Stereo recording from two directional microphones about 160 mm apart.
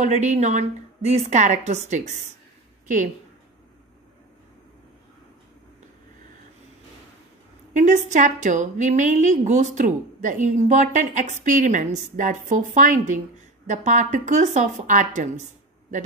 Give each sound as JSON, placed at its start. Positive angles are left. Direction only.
{"t": 0.0, "sound": "a woman's voice", "side_deg": -45}
{"t": 7.7, "sound": "a woman's voice", "side_deg": -50}